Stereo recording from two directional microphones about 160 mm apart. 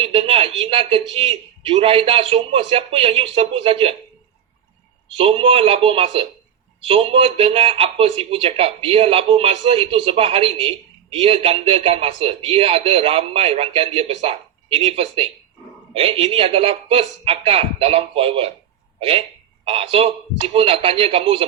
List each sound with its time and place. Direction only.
0.0 s speech: 35° right (ahead or behind)
5.1 s speech: 35° right (ahead or behind)